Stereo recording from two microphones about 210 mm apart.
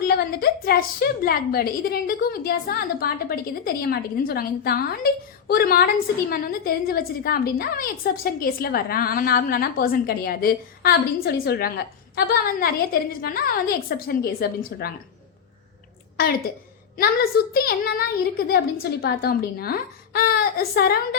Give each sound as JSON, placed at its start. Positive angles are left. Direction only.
{"t": 0.1, "sound": "a woman's voice", "side_deg": 45}
{"t": 17.0, "sound": "a woman's voice", "side_deg": 45}